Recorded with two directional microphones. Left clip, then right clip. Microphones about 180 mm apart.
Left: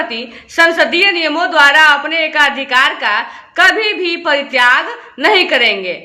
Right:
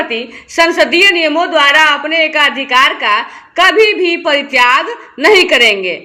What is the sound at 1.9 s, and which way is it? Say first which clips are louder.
A woman's voice: right 1 dB; 20° right (ahead or behind).